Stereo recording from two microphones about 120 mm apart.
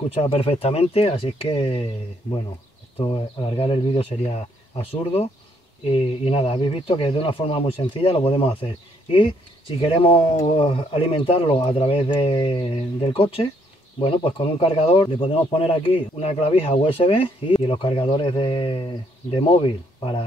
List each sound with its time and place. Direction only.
0.1 s speech: 55° left (ahead or behind)
3.0 s speech: 45° left (ahead or behind)